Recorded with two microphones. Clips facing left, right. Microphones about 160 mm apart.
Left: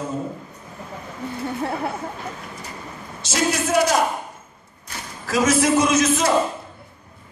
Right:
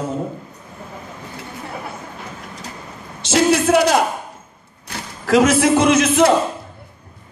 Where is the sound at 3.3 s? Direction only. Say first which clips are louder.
Right 6 dB; 65° right (ahead or behind).